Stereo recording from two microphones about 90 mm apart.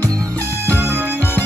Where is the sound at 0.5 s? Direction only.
20° left (ahead or behind).